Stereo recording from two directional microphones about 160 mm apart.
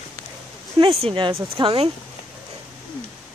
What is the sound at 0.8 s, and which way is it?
Speech, 35° right (ahead or behind).